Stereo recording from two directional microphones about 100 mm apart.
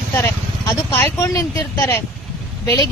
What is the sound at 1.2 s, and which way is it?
Speech, 30° left (ahead or behind).